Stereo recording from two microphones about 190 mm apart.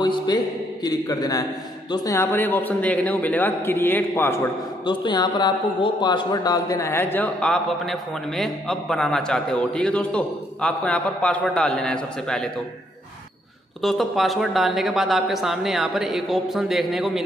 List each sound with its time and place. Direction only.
0.0 s a sound: 25° left (ahead or behind)
0.8 s a man's voice: 20° left (ahead or behind)
4.8 s speech: 25° left (ahead or behind); by 12.4 s 5° left (ahead or behind)
13.7 s speech: centre (ahead or behind)